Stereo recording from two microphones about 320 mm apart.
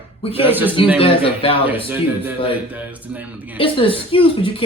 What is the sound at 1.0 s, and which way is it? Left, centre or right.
Speech, centre.